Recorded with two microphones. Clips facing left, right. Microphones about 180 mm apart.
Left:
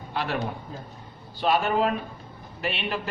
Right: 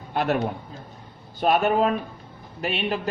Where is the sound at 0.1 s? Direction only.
50° right (ahead or behind).